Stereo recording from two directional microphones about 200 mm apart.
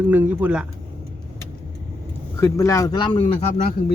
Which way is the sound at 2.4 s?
15° left (ahead or behind).